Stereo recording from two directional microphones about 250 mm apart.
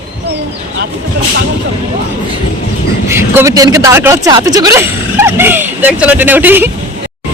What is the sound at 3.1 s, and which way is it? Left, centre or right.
Speech, centre.